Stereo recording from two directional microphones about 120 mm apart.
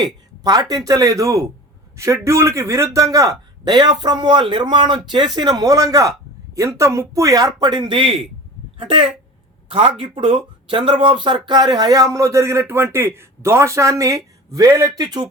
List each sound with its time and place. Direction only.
0.0 s speech: 35° right (ahead or behind)
3.6 s a man's voice: 40° right (ahead or behind)